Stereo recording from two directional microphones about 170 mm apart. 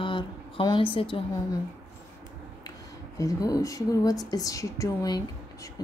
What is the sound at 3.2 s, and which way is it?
Speech, 20° left (ahead or behind).